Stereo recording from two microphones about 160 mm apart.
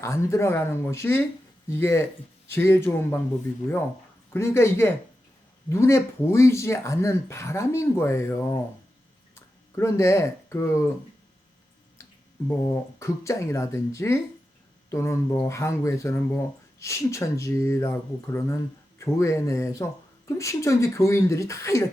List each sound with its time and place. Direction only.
0.0 s speech: 20° left (ahead or behind)
4.3 s speech: 15° left (ahead or behind)
9.7 s speech: 20° left (ahead or behind)
12.5 s speech: 15° left (ahead or behind)